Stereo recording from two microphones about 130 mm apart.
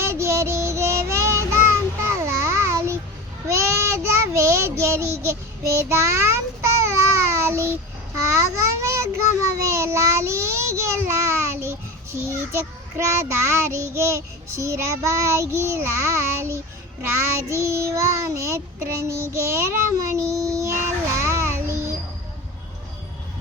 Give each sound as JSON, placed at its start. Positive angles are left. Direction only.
{"t": 0.0, "sound": "child singing", "side_deg": -20}
{"t": 8.1, "sound": "a child's voice", "side_deg": -20}
{"t": 21.2, "sound": "child singing", "side_deg": -20}